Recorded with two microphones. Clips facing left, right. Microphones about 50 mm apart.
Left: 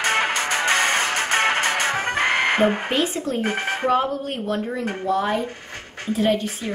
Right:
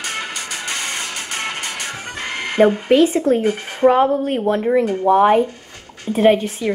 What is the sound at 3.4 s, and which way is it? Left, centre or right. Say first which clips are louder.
Speech: right 6 dB; left.